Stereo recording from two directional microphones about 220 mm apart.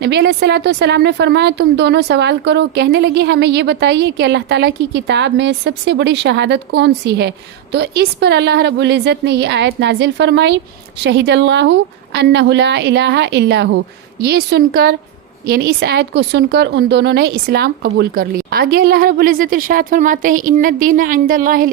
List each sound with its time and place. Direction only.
0.0 s a woman's voice: 50° right (ahead or behind)